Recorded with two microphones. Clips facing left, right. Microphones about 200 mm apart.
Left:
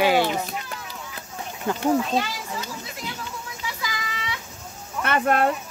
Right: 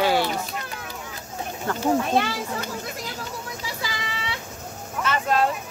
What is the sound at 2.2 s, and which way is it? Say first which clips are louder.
Speech: right 3 dB; 60° right (ahead or behind).